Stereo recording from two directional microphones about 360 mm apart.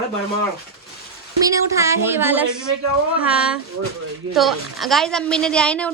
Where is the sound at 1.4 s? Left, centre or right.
Centre.